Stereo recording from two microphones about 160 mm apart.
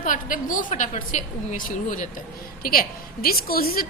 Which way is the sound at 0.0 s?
55° left (ahead or behind).